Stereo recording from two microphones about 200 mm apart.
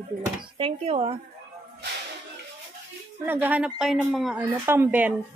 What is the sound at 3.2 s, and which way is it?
A woman's voice, 10° right (ahead or behind).